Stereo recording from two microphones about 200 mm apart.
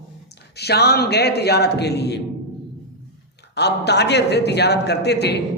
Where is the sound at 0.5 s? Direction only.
55° left (ahead or behind).